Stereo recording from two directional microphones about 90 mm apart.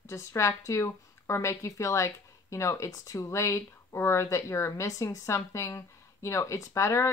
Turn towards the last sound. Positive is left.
turn(degrees=35)  # may be behind; listen again after turning